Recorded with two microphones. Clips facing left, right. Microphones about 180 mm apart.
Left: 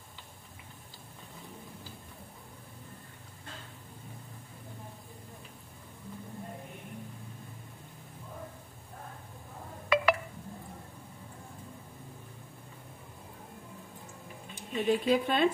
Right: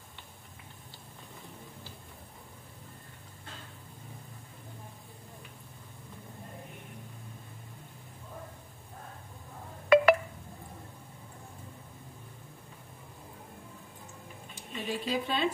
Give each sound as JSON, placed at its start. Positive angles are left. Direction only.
{"t": 9.9, "sound": "wind chime", "side_deg": -50}
{"t": 14.5, "sound": "speech", "side_deg": 55}